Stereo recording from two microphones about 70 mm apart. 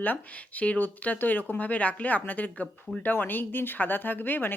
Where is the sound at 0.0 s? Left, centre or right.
Left.